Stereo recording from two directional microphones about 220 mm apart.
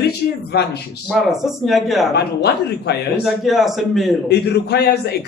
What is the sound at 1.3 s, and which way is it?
Speech, centre (ahead or behind).